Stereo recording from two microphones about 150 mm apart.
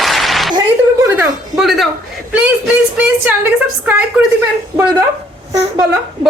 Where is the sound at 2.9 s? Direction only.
10° right (ahead or behind).